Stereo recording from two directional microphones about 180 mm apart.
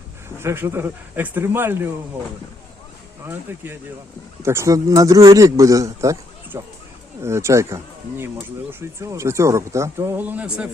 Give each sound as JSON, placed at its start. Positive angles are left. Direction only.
{"t": 0.3, "sound": "speech", "side_deg": -10}
{"t": 3.2, "sound": "speech", "side_deg": -10}